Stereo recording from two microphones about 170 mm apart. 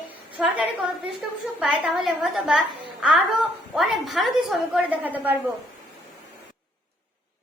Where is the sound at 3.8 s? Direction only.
Centre (ahead or behind).